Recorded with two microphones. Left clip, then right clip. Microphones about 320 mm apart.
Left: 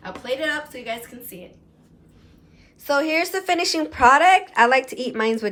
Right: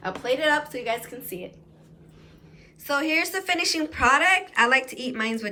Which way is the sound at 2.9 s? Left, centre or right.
Centre.